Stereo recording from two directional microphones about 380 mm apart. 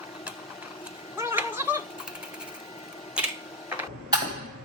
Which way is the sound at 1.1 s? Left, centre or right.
Centre.